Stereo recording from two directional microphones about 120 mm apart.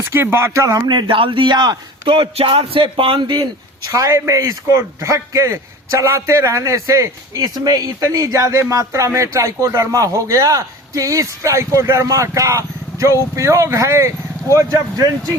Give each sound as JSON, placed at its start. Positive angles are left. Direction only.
{"t": 0.0, "sound": "a man's voice", "side_deg": -20}